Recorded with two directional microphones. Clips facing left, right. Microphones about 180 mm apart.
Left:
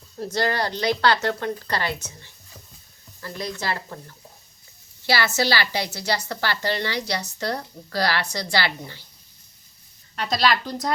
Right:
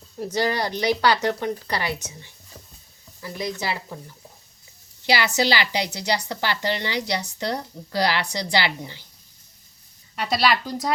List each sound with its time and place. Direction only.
0.2 s a woman's voice: 15° right (ahead or behind)
10.2 s a woman's voice: 5° right (ahead or behind)